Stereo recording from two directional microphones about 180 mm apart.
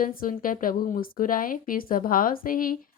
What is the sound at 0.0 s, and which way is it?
Speech, 50° left (ahead or behind).